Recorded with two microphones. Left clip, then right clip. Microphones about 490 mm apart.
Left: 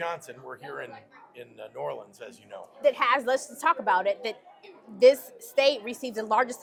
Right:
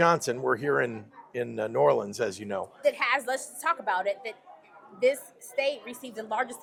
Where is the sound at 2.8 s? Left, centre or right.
Left.